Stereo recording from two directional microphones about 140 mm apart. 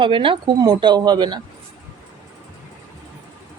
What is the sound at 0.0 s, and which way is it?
Speech, 40° right (ahead or behind).